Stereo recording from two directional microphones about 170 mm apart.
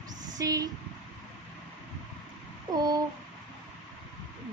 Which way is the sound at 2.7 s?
25° right (ahead or behind).